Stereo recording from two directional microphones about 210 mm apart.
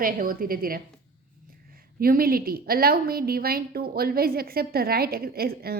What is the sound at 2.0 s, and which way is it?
A woman's voice, 45° right (ahead or behind).